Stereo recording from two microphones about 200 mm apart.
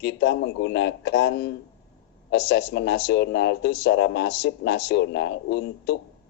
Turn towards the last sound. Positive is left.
turn(degrees=55)  # may be behind; listen again after turning